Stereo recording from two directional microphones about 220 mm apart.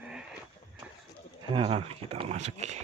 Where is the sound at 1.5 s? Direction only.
25° right (ahead or behind).